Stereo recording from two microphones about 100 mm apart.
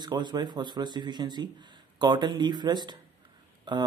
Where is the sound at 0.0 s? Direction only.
45° right (ahead or behind).